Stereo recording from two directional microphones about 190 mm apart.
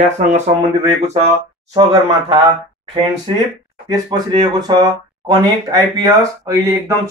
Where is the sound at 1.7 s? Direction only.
25° right (ahead or behind).